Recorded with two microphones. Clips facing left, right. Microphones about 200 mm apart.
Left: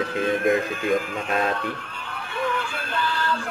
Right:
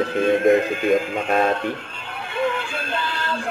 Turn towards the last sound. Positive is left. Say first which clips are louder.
# even
turn(degrees=-25)  # may be behind; listen again after turning